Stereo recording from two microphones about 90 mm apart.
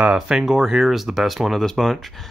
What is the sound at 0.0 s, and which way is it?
Speech, 10° right (ahead or behind).